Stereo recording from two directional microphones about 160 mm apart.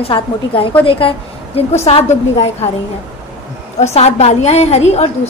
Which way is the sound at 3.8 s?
45° left (ahead or behind).